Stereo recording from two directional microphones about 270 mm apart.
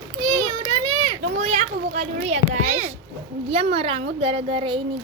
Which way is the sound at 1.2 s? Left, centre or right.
Right.